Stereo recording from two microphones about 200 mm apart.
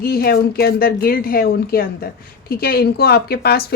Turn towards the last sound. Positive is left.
turn(degrees=50)  # may be behind; listen again after turning